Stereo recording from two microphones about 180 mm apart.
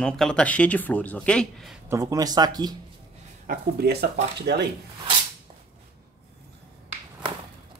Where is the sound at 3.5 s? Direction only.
60° right (ahead or behind).